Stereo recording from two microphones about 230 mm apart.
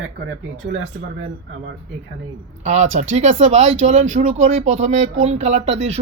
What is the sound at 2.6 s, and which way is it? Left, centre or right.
Speech, right.